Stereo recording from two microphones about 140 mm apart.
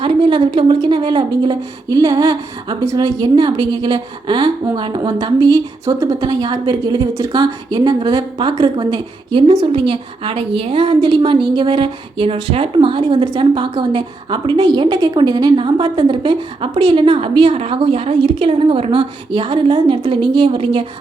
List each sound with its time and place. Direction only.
0.0 s a woman's voice: 40° right (ahead or behind)